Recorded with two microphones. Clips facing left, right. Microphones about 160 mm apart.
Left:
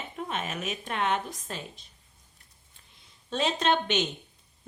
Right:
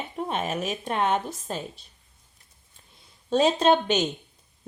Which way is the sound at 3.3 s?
35° right (ahead or behind).